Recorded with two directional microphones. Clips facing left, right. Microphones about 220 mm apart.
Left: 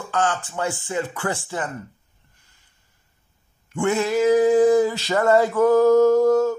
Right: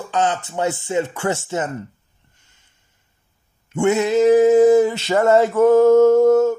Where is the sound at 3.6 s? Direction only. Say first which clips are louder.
Right 4 dB; 20° right (ahead or behind).